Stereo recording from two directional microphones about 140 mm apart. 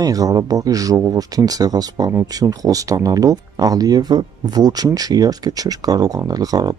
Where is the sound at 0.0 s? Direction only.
25° right (ahead or behind).